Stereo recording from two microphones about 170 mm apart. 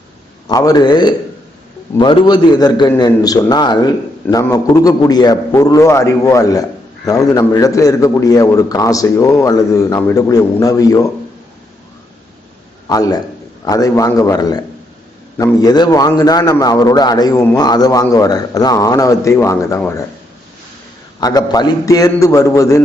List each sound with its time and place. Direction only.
0.4 s a man's voice: 25° left (ahead or behind)
12.9 s a man's voice: 20° left (ahead or behind)
15.6 s a man's voice: 25° left (ahead or behind)
21.2 s a man's voice: 20° left (ahead or behind)